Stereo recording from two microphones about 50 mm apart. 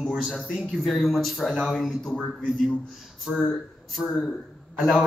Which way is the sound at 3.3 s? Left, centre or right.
Centre.